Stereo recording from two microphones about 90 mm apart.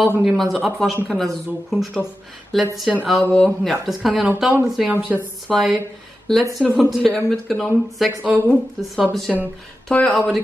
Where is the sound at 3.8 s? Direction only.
Centre (ahead or behind).